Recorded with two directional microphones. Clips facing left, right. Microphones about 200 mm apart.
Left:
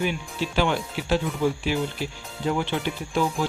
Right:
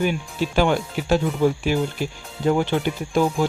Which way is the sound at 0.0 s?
45° right (ahead or behind).